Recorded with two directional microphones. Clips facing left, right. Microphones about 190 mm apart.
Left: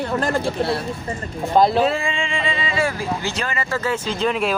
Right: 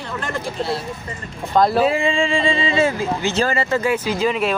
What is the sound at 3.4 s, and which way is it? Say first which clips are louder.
Speech: right 6 dB; 35° right (ahead or behind).